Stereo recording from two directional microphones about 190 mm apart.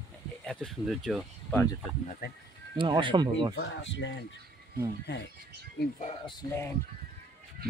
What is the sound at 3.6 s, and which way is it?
Speech, 75° left (ahead or behind).